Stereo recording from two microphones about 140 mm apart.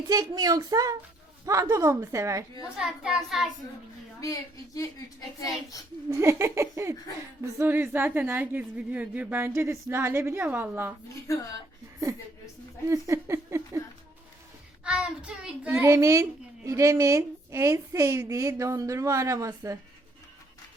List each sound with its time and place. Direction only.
0.1 s a woman's voice: 25° right (ahead or behind)
2.7 s a child's voice: 5° right (ahead or behind)
4.2 s a woman's voice: 25° left (ahead or behind)
6.1 s a woman's voice: 20° right (ahead or behind)
12.9 s a woman's voice: 20° right (ahead or behind)
14.8 s a woman's voice: 5° right (ahead or behind)
15.8 s a woman's voice: 20° right (ahead or behind)